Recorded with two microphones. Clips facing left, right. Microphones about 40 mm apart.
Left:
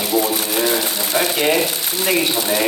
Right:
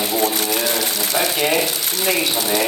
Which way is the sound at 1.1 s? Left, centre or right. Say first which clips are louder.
Left 2 dB; centre.